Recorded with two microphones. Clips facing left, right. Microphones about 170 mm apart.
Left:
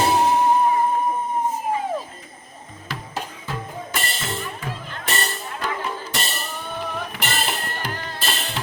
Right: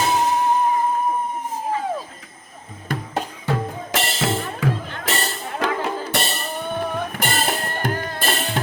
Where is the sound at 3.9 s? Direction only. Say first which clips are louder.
Right 8 dB; 90° right.